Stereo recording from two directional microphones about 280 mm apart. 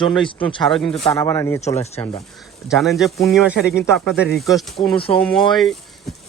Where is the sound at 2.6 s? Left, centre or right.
Centre.